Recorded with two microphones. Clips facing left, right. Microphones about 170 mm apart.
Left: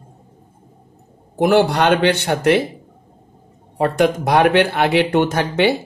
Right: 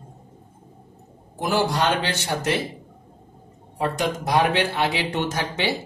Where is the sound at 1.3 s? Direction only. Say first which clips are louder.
Left 8 dB; 65° left (ahead or behind).